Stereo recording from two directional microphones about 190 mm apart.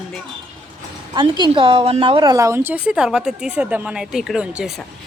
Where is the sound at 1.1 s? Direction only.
25° right (ahead or behind); by 4.9 s centre (ahead or behind).